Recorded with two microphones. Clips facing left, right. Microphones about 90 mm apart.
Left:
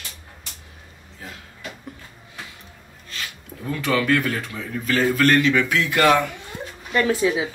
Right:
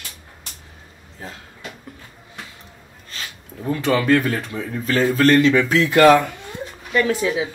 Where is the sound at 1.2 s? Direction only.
35° right (ahead or behind).